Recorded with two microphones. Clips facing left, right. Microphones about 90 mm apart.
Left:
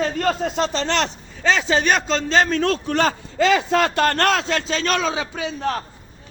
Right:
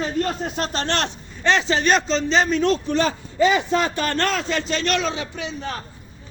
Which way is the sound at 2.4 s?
85° left.